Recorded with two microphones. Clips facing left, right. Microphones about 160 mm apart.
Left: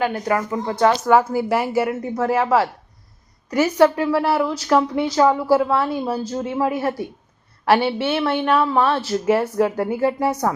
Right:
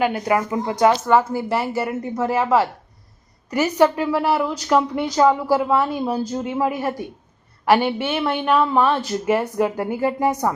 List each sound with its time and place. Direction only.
0.0 s a woman's voice: 10° right (ahead or behind)
1.0 s a woman's voice: 10° left (ahead or behind)
2.1 s a woman's voice: 10° right (ahead or behind)